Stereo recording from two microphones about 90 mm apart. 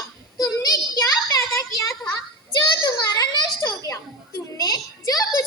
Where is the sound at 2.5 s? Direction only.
50° left (ahead or behind).